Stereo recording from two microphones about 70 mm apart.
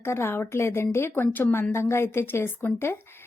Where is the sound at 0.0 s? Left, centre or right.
Left.